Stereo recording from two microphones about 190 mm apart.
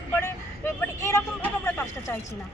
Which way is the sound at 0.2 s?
10° left (ahead or behind).